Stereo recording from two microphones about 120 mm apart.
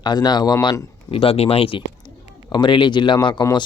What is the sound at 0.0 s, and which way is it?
Speech, 35° left (ahead or behind).